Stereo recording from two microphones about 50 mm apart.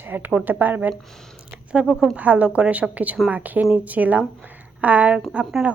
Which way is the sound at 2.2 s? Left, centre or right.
Right.